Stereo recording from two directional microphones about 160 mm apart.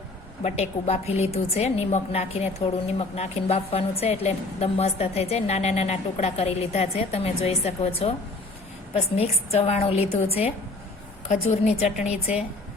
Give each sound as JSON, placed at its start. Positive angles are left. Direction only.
{"t": 0.4, "sound": "a woman's voice", "side_deg": 40}